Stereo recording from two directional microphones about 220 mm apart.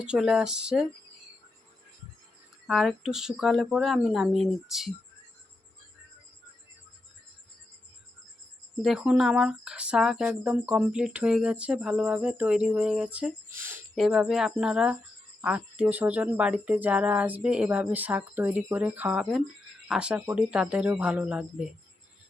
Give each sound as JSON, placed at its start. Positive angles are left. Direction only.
{"t": 0.0, "sound": "speech", "side_deg": -5}
{"t": 2.6, "sound": "speech", "side_deg": 0}
{"t": 8.8, "sound": "speech", "side_deg": 0}